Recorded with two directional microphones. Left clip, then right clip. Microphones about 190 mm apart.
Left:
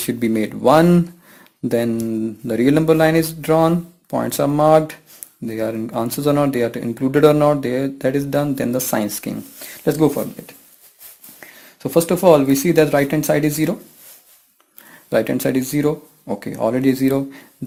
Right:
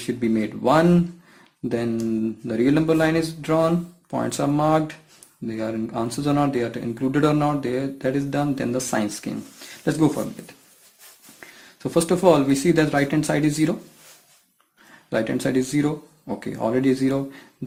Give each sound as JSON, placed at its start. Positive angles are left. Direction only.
{"t": 0.1, "sound": "speech", "side_deg": 50}
{"t": 15.1, "sound": "speech", "side_deg": 40}